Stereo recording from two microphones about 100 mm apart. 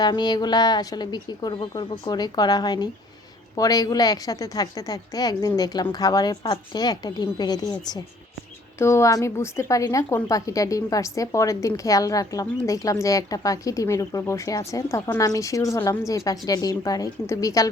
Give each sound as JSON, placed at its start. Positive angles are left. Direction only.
{"t": 0.0, "sound": "a woman's voice", "side_deg": 45}
{"t": 8.8, "sound": "a woman's voice", "side_deg": 30}